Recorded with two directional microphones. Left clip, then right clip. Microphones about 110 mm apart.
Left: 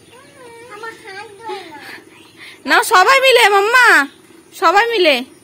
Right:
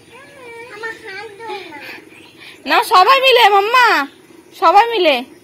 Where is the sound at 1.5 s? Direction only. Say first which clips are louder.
Left 1 dB; 50° left (ahead or behind).